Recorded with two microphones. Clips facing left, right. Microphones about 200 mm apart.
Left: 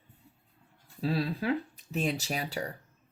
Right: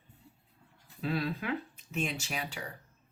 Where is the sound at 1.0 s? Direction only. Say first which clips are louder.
Left 3 dB; 35° left (ahead or behind).